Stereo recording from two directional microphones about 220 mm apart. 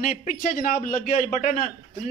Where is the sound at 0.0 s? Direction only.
35° left (ahead or behind).